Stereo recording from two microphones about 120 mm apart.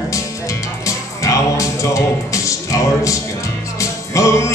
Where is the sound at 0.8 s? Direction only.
25° left (ahead or behind).